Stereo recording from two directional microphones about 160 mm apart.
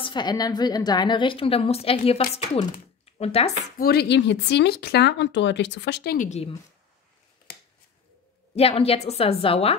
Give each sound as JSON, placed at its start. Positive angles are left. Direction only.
{"t": 0.0, "sound": "a woman's voice", "side_deg": 25}
{"t": 3.7, "sound": "speech", "side_deg": 75}
{"t": 6.1, "sound": "a woman's voice", "side_deg": 45}
{"t": 8.5, "sound": "a woman's voice", "side_deg": 40}